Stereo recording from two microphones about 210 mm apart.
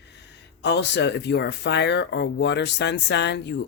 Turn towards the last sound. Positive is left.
turn(degrees=55)  # may be behind; listen again after turning